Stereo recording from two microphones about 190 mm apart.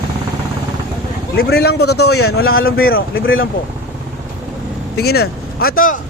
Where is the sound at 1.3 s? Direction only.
55° left (ahead or behind).